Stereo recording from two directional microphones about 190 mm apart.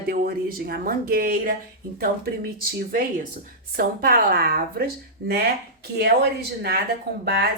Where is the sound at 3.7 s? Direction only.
50° right (ahead or behind).